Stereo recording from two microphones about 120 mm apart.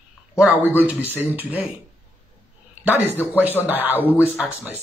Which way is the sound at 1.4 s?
15° right (ahead or behind).